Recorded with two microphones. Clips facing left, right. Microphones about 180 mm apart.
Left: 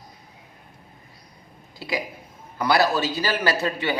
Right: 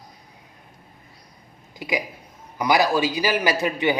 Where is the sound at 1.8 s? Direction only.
15° right (ahead or behind).